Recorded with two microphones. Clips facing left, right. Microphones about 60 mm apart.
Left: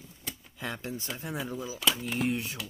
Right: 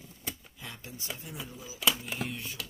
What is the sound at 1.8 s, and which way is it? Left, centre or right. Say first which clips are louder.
Speech: even; centre.